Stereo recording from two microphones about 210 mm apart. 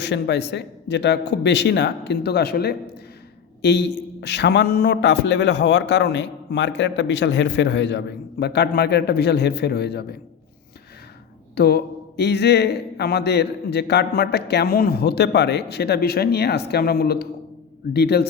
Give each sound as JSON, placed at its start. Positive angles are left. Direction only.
{"t": 0.0, "sound": "a man's voice", "side_deg": 55}
{"t": 11.5, "sound": "a man's voice", "side_deg": 50}